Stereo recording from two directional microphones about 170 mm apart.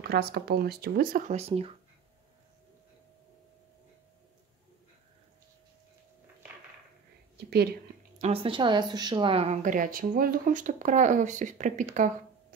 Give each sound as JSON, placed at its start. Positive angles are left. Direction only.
{"t": 0.1, "sound": "speech", "side_deg": -70}
{"t": 7.3, "sound": "a sound", "side_deg": -70}
{"t": 8.2, "sound": "a woman's voice", "side_deg": -35}